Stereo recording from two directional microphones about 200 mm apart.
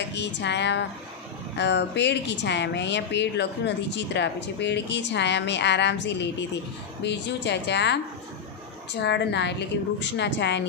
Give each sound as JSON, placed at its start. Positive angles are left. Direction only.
{"t": 0.1, "sound": "a woman's voice", "side_deg": 60}